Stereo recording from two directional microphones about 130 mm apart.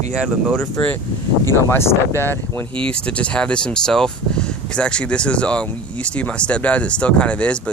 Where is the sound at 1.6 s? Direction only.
20° left (ahead or behind).